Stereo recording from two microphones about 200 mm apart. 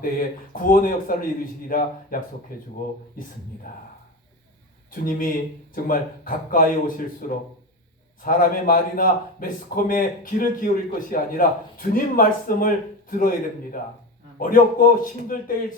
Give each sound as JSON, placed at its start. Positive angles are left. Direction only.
{"t": 0.0, "sound": "a man's voice", "side_deg": 45}
{"t": 3.7, "sound": "a man's voice", "side_deg": 40}
{"t": 4.9, "sound": "a man's voice", "side_deg": 45}